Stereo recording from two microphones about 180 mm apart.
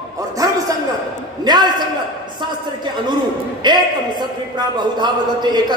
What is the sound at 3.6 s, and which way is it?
A man's voice, 25° right (ahead or behind).